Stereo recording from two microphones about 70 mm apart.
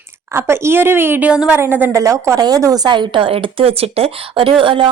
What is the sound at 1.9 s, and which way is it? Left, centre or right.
Speech, right.